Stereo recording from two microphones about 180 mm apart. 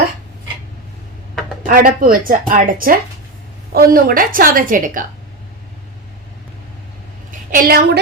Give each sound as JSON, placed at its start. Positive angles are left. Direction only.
{"t": 1.6, "sound": "speech", "side_deg": -50}
{"t": 7.3, "sound": "a woman's voice", "side_deg": -50}